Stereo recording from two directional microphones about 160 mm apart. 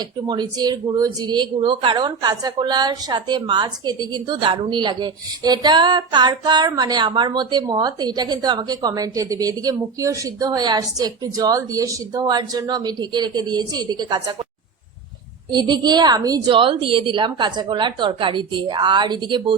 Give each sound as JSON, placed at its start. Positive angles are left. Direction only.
{"t": 0.3, "sound": "a woman's voice", "side_deg": -25}
{"t": 15.5, "sound": "a woman's voice", "side_deg": -25}